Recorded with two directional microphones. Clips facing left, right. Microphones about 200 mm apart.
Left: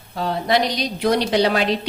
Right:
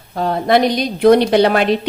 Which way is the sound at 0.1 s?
50° right (ahead or behind).